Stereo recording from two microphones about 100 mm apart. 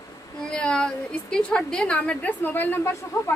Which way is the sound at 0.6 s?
10° left (ahead or behind).